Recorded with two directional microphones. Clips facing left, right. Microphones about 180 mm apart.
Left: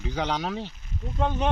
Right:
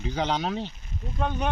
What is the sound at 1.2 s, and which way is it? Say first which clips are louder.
Speech: left 2 dB; 20° left (ahead or behind).